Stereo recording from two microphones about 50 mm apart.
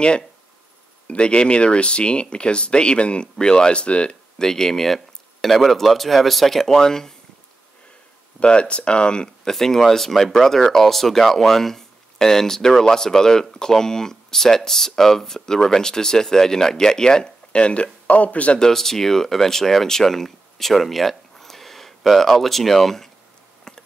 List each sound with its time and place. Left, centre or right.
1.0 s speech: centre
4.4 s speech: centre
8.4 s speech: left
18.6 s speech: centre
23.7 s a sound: centre